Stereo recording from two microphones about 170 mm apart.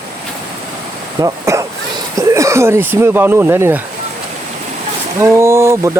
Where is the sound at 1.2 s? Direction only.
15° right (ahead or behind).